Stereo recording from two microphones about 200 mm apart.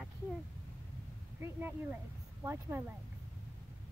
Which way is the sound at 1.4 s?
10° right (ahead or behind).